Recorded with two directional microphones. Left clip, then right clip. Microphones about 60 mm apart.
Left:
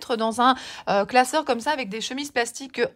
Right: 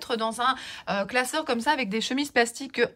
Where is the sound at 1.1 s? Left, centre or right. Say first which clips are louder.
Left 6 dB; left.